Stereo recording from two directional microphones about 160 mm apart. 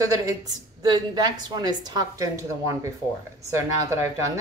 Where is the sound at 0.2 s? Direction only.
20° right (ahead or behind).